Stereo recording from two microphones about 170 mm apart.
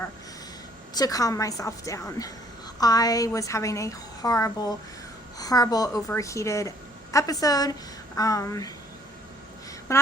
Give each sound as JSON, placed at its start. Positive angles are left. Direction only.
{"t": 0.9, "sound": "a woman's voice", "side_deg": 20}
{"t": 9.9, "sound": "speech", "side_deg": 20}